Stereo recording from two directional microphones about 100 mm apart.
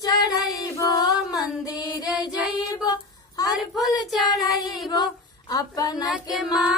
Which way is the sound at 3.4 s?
40° left (ahead or behind).